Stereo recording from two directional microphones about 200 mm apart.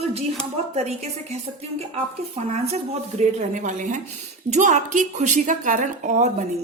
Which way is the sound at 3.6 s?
40° right (ahead or behind).